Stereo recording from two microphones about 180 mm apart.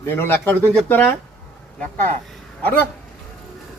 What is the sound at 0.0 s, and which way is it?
Speech, 10° left (ahead or behind).